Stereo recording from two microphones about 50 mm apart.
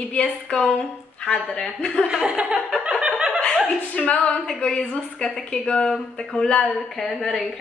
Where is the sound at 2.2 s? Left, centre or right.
Centre.